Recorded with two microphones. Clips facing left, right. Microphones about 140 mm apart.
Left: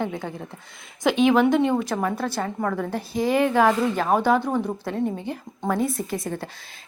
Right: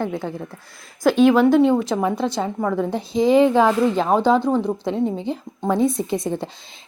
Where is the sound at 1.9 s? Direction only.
15° right (ahead or behind).